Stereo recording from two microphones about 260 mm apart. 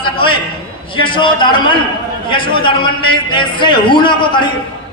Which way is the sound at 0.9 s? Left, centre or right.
Centre.